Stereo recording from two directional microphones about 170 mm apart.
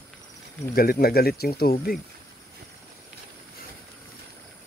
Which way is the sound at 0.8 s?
60° left (ahead or behind).